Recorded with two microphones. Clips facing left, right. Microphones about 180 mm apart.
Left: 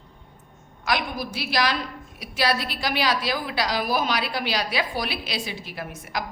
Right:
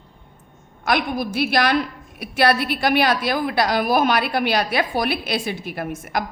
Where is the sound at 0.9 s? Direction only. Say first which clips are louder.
Right 5 dB; 55° right (ahead or behind).